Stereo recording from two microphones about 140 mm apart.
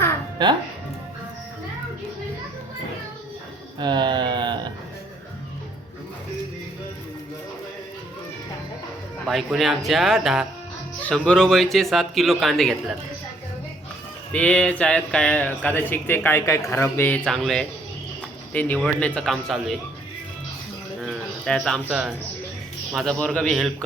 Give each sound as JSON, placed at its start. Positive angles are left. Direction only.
{"t": 3.8, "sound": "a sound", "side_deg": -30}
{"t": 9.2, "sound": "a man's voice", "side_deg": 0}
{"t": 11.0, "sound": "a man's voice", "side_deg": 10}
{"t": 14.3, "sound": "speech", "side_deg": 10}
{"t": 17.2, "sound": "a man's voice", "side_deg": 5}
{"t": 18.8, "sound": "a man's voice", "side_deg": 5}
{"t": 21.0, "sound": "a sound", "side_deg": 5}
{"t": 23.0, "sound": "a man's voice", "side_deg": 5}